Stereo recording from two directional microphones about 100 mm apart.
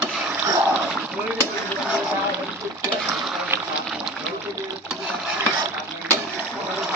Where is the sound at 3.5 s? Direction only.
25° right (ahead or behind).